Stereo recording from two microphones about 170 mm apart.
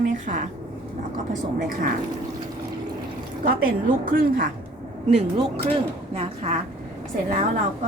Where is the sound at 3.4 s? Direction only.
55° right (ahead or behind).